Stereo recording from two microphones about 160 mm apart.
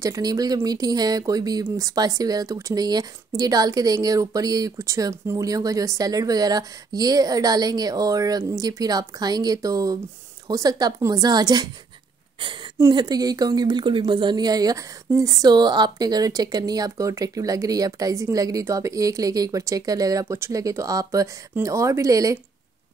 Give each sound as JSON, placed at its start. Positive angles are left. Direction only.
{"t": 0.0, "sound": "speech", "side_deg": -20}
{"t": 12.7, "sound": "speech", "side_deg": -20}